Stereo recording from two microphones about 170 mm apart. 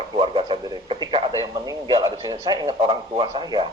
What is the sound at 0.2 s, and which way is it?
Radio, 30° right (ahead or behind).